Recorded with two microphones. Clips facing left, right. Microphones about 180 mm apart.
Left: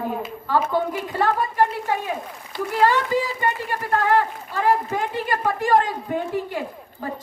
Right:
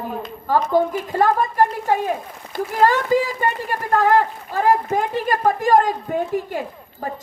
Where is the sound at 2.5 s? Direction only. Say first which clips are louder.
Right 2 dB; 45° right (ahead or behind).